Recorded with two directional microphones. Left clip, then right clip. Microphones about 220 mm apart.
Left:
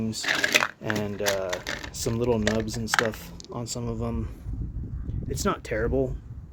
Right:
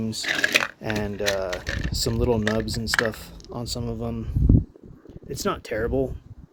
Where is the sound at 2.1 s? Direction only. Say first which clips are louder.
Right 1 dB; 10° right (ahead or behind).